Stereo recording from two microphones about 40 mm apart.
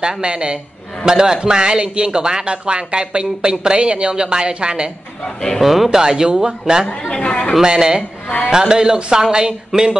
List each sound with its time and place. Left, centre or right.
0.0 s a man's voice: right
5.6 s speech: centre
7.1 s speech: left
7.6 s a man's voice: centre